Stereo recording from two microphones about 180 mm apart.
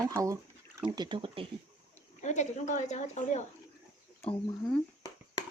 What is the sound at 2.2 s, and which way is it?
A woman's voice, 40° left (ahead or behind).